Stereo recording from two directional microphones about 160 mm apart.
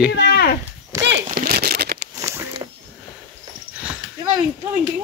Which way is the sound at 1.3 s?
70° right (ahead or behind).